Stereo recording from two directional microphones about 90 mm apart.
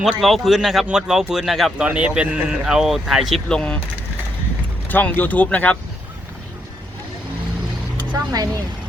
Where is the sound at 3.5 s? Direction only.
10° left (ahead or behind).